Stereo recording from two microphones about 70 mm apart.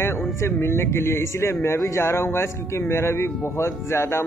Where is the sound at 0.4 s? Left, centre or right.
Left.